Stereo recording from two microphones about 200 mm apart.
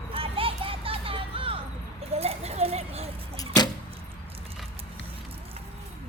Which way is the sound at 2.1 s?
30° right (ahead or behind).